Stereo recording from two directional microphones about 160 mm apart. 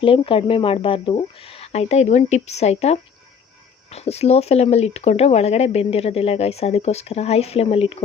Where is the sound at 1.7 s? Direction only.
45° left (ahead or behind).